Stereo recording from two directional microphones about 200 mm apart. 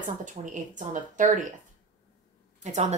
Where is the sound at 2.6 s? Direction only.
35° right (ahead or behind).